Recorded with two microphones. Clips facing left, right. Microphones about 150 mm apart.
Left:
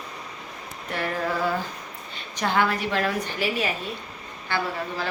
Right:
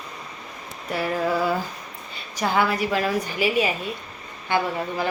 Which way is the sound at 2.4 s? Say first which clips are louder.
Right 2 dB; 10° right (ahead or behind).